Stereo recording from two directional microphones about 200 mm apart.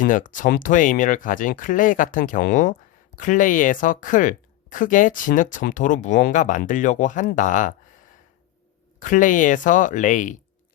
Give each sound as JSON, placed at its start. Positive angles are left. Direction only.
{"t": 0.0, "sound": "speech", "side_deg": 40}
{"t": 9.0, "sound": "speech", "side_deg": 40}